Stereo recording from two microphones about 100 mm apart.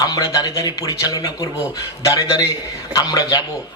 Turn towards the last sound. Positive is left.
turn(degrees=35)  # may be behind; listen again after turning